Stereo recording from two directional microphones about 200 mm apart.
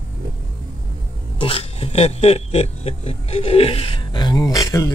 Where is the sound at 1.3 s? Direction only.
25° left (ahead or behind).